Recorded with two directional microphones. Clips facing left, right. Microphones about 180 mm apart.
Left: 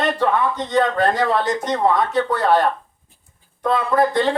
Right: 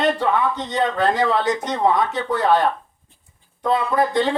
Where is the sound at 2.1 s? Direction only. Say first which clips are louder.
Left 1 dB; 15° right (ahead or behind).